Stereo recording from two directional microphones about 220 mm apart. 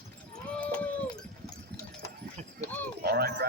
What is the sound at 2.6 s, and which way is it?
Dog, 5° left (ahead or behind).